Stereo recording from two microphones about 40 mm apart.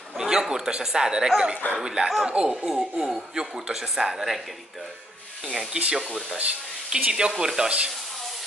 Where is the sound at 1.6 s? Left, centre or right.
Left.